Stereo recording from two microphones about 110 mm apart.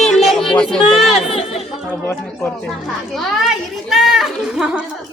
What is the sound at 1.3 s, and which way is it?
Speech, 70° left (ahead or behind).